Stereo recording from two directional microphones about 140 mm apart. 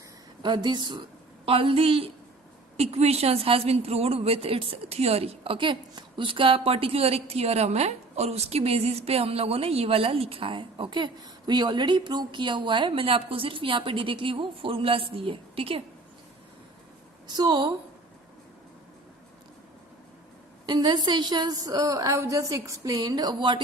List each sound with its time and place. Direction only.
0.4 s a woman's voice: 35° right (ahead or behind)
17.2 s a woman's voice: 30° right (ahead or behind)
20.7 s a woman's voice: 30° right (ahead or behind)